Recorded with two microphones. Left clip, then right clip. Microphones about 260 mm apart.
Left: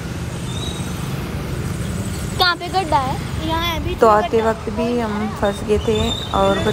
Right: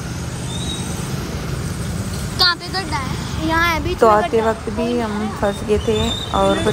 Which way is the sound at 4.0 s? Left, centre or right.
Centre.